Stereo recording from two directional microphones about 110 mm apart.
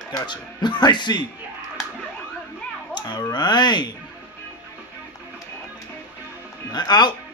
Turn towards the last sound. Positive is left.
turn(degrees=40)  # may be behind; listen again after turning